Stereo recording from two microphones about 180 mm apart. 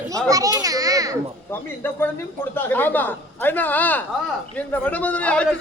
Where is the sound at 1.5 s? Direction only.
10° left (ahead or behind).